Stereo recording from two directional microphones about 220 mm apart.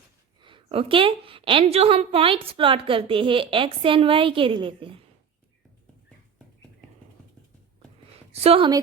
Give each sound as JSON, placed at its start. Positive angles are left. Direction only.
{"t": 0.4, "sound": "a woman's voice", "side_deg": -25}
{"t": 8.3, "sound": "a woman's voice", "side_deg": -25}